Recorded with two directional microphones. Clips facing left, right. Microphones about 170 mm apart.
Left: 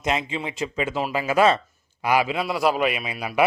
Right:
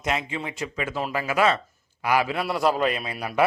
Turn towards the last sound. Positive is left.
turn(degrees=10)  # may be behind; listen again after turning